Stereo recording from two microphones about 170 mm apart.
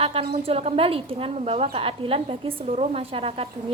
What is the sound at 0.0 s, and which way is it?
A woman's voice, 35° right (ahead or behind).